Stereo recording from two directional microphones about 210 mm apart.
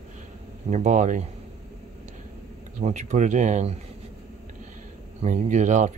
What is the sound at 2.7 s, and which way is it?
Speech, 35° right (ahead or behind).